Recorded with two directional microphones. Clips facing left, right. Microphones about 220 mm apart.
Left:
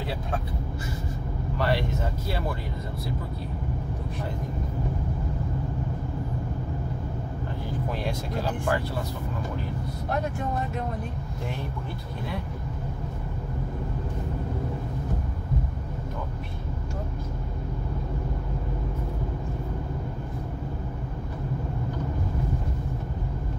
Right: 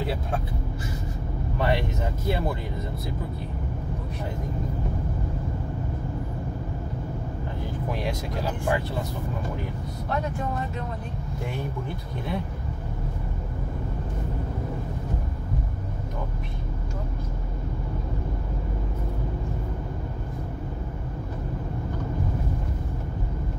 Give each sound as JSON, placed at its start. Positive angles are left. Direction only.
{"t": 1.6, "sound": "vehicle", "side_deg": -20}